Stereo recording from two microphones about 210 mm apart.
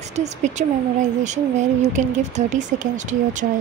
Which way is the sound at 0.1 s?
35° right (ahead or behind).